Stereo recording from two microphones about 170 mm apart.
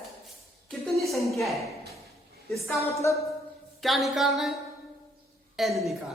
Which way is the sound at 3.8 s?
Centre (ahead or behind).